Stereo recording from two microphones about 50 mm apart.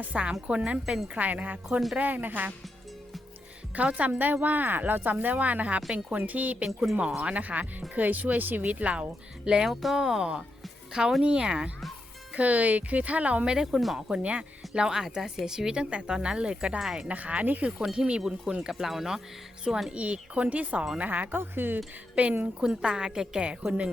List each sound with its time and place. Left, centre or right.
0.0 s speech: right
3.8 s speech: right
9.6 s speech: centre
11.2 s speech: centre
12.4 s speech: right
13.5 s speech: centre
13.7 s speech: centre
14.1 s speech: right
17.1 s speech: right
17.9 s speech: centre
19.9 s speech: right
21.3 s speech: right
22.1 s speech: right